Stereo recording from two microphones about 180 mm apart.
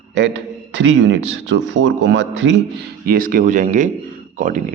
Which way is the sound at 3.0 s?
50° right (ahead or behind).